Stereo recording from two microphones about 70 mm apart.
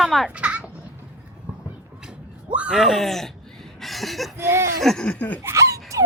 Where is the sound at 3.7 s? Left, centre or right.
Centre.